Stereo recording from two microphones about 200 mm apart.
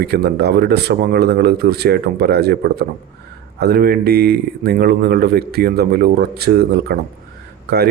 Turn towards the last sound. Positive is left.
turn(degrees=-55)  # may be behind; listen again after turning